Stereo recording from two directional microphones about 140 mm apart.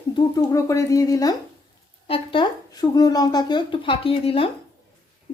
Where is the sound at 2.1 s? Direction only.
35° left (ahead or behind).